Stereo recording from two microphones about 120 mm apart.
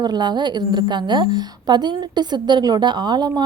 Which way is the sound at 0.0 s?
35° right (ahead or behind).